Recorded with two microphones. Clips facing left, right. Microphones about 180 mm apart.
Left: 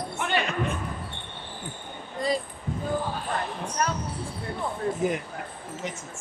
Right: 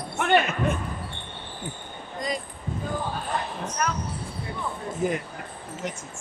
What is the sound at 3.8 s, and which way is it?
Speech, 30° left (ahead or behind).